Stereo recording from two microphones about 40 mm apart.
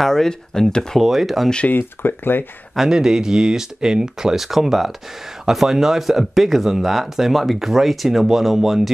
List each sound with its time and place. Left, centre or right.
0.0 s speech: centre
0.9 s speech: centre
1.8 s speech: left
2.9 s speech: centre